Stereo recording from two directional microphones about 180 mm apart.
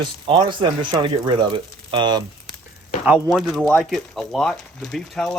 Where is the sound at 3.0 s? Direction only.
5° right (ahead or behind).